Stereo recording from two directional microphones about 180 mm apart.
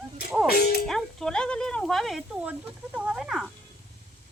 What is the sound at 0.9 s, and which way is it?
Speech, centre (ahead or behind).